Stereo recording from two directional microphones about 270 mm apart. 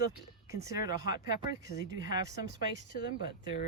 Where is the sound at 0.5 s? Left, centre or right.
Centre.